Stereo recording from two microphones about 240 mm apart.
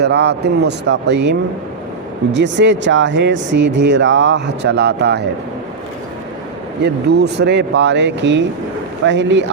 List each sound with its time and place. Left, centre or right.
0.0 s speech: right
6.8 s speech: right